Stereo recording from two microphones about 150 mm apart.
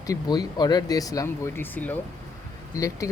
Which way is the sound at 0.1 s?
25° left (ahead or behind).